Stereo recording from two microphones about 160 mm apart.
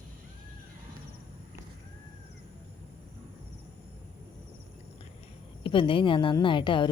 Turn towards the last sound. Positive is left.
turn(degrees=30)  # may be behind; listen again after turning